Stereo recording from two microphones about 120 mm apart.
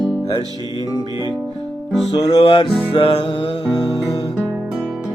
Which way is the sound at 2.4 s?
45° left (ahead or behind).